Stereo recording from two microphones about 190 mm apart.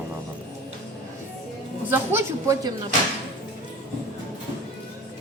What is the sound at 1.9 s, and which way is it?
Speech, 10° right (ahead or behind).